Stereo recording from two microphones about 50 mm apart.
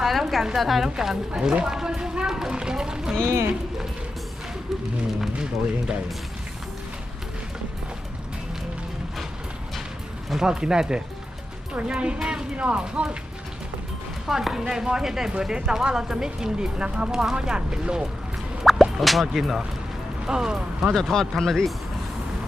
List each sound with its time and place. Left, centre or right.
0.0 s a woman's voice: centre
10.2 s speech: centre
12.2 s speech: centre
14.3 s speech: centre
18.6 s speech: centre
20.9 s speech: centre